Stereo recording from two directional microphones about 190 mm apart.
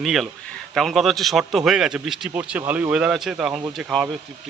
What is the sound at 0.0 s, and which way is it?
A man's voice, centre (ahead or behind).